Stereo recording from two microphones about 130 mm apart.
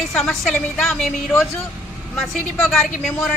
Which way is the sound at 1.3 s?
15° left (ahead or behind).